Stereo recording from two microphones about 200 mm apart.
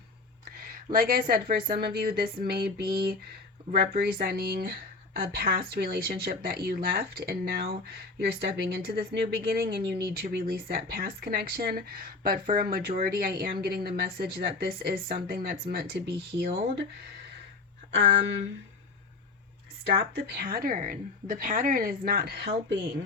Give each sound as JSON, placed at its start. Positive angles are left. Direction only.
{"t": 0.5, "sound": "a sound", "side_deg": -45}
{"t": 1.3, "sound": "speech", "side_deg": -50}
{"t": 18.0, "sound": "speech", "side_deg": -55}
{"t": 19.8, "sound": "speech", "side_deg": -50}